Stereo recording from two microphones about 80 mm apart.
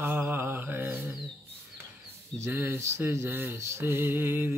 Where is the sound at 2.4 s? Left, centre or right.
Right.